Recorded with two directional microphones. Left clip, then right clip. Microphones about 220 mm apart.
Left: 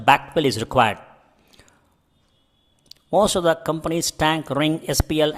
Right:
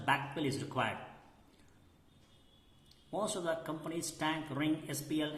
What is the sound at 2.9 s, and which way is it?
Speech, 50° left (ahead or behind).